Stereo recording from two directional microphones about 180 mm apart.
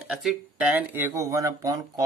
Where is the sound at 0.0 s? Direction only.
5° right (ahead or behind).